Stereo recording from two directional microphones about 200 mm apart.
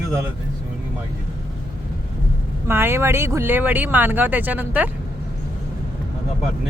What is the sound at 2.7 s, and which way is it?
Speech, 10° right (ahead or behind).